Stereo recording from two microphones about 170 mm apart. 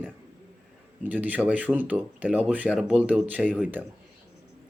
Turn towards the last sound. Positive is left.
turn(degrees=-10)  # may be behind; listen again after turning